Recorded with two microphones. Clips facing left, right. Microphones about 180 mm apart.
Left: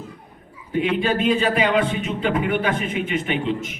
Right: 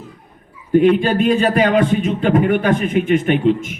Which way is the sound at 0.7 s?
45° right (ahead or behind).